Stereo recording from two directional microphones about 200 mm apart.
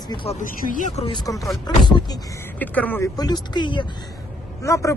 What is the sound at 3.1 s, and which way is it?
Speech, 20° left (ahead or behind).